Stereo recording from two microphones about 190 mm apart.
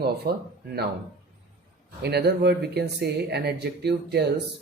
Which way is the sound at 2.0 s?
60° right (ahead or behind).